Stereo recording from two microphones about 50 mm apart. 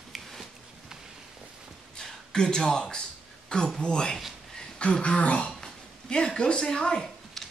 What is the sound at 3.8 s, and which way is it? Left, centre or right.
Speech, centre.